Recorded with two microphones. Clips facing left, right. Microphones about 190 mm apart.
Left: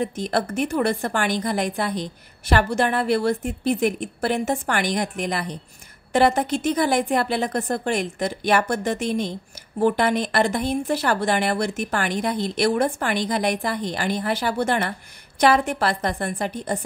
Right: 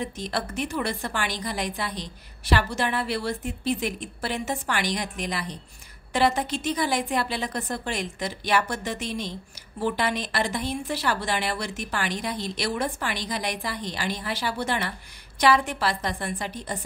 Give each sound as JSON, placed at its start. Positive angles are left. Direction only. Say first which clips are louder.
{"t": 0.0, "sound": "speech", "louder": "left 6 dB", "side_deg": 50}